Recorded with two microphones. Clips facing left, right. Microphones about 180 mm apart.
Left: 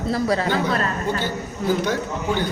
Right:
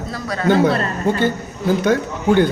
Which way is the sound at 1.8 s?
55° right (ahead or behind).